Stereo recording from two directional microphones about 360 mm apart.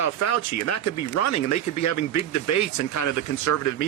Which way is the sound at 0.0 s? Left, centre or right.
Left.